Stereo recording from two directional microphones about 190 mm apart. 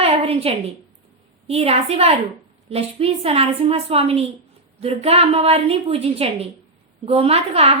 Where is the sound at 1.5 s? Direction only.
30° right (ahead or behind).